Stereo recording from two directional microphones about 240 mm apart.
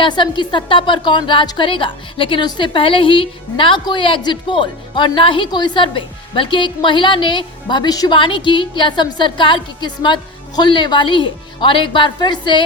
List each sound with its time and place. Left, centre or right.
0.0 s a woman's voice: centre